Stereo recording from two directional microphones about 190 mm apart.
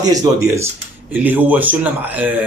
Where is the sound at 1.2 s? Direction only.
10° right (ahead or behind).